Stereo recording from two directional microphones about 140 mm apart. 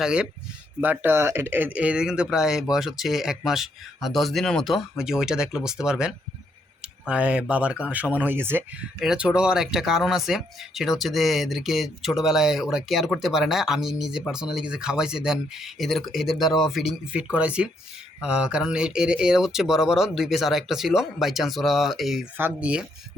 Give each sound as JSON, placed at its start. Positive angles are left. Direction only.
{"t": 0.0, "sound": "speech", "side_deg": -5}
{"t": 9.0, "sound": "speech", "side_deg": -5}
{"t": 22.4, "sound": "speech", "side_deg": -10}